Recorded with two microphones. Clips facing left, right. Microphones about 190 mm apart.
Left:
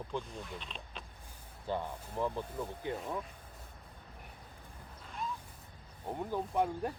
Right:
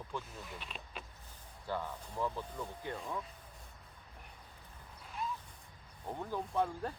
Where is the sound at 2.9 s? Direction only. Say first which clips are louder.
Left 3 dB; 20° left (ahead or behind).